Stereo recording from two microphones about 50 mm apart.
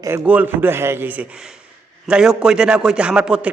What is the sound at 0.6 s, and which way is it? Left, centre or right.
Speech, right.